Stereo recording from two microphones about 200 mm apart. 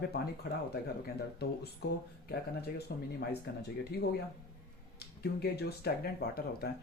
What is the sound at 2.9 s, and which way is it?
Speech, 50° left (ahead or behind).